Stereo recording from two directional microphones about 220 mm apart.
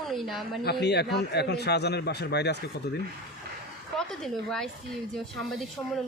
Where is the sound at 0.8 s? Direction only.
50° left (ahead or behind).